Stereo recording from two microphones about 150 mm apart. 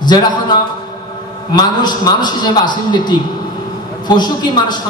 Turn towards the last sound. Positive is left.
turn(degrees=30)  # may be behind; listen again after turning